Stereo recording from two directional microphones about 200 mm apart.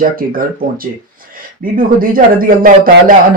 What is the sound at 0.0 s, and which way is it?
Speech, 45° right (ahead or behind).